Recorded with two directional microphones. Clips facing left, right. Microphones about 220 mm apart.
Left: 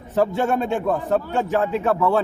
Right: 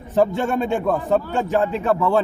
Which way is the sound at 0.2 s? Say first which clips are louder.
Right 1 dB; 5° left (ahead or behind).